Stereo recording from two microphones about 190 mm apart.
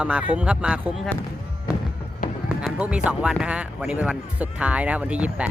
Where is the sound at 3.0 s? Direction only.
5° right (ahead or behind).